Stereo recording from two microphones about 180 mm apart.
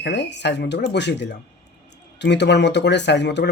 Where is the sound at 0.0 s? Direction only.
75° left (ahead or behind).